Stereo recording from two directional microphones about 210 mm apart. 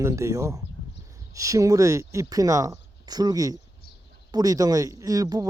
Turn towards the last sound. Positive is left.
turn(degrees=-20)  # may be behind; listen again after turning